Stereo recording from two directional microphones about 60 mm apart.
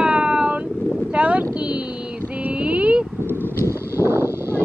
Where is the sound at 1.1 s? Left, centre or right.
Right.